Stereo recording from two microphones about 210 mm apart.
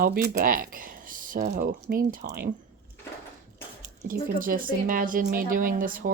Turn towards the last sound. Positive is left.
turn(degrees=-40)  # may be behind; listen again after turning